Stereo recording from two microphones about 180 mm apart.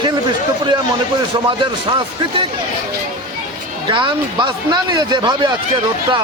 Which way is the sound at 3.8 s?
25° right (ahead or behind).